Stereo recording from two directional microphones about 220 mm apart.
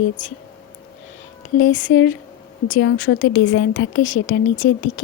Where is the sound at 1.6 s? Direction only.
60° left (ahead or behind).